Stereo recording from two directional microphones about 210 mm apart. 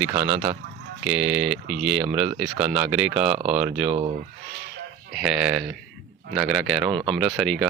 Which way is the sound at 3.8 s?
25° right (ahead or behind).